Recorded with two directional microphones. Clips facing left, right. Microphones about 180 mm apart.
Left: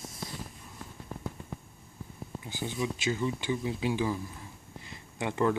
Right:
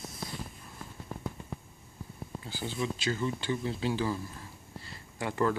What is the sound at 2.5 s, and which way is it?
Speech, 20° left (ahead or behind).